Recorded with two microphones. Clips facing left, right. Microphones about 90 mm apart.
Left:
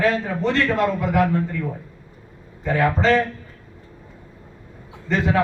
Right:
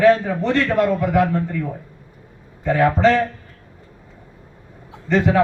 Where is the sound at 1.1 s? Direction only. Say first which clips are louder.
Even; 20° right (ahead or behind).